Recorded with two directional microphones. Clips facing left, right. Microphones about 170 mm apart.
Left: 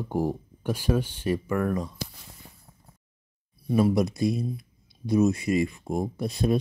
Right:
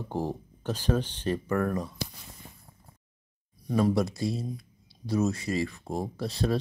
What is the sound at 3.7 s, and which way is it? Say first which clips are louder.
Speech: left 3 dB; 10° left (ahead or behind).